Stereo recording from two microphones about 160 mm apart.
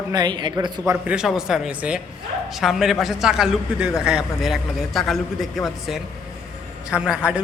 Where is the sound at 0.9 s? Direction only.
5° right (ahead or behind).